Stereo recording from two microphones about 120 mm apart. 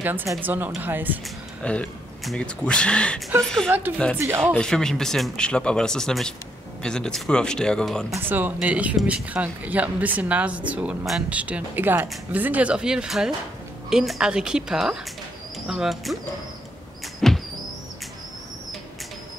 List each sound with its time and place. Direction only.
0.0 s speech: 15° right (ahead or behind)
1.6 s speech: 10° left (ahead or behind)
8.2 s speech: 15° right (ahead or behind); by 16.2 s centre (ahead or behind)
17.2 s music: 5° left (ahead or behind)